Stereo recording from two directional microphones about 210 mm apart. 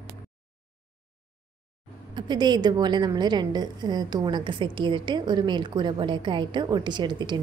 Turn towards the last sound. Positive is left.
turn(degrees=-20)  # may be behind; listen again after turning